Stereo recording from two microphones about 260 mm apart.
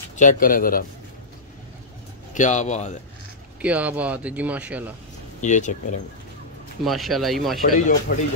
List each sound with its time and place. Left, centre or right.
0.1 s speech: left
2.3 s speech: left
3.6 s speech: centre
5.4 s speech: left
6.8 s speech: centre
7.6 s speech: left